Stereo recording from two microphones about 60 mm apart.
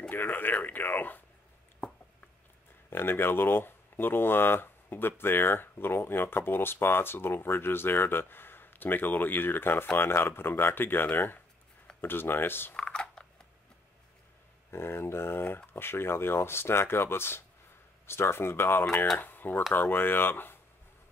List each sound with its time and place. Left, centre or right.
0.1 s speech: left
2.9 s speech: left
12.7 s a sound: centre
14.7 s speech: left